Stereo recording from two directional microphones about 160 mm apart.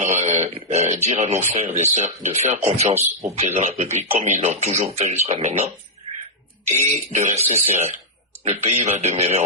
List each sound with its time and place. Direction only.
0.0 s speech: 45° right (ahead or behind)
2.9 s speech: 20° right (ahead or behind)
3.3 s speech: 45° right (ahead or behind)
7.3 s speech: 40° right (ahead or behind)